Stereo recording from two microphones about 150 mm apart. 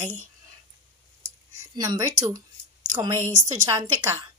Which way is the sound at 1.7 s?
25° right (ahead or behind).